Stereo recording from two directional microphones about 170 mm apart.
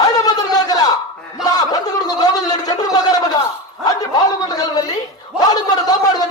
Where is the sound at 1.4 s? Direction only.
20° left (ahead or behind).